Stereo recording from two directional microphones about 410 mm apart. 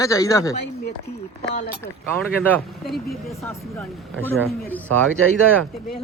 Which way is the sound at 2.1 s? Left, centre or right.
Centre.